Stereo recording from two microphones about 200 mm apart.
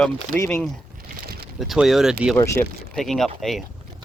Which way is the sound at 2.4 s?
15° left (ahead or behind).